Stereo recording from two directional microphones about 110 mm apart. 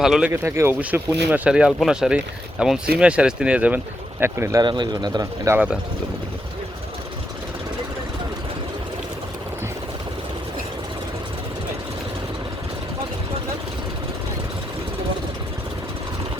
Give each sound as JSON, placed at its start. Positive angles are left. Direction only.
{"t": 0.0, "sound": "speech", "side_deg": -5}
{"t": 0.3, "sound": "speech", "side_deg": -20}
{"t": 4.2, "sound": "speech", "side_deg": -25}
{"t": 4.6, "sound": "speech", "side_deg": -45}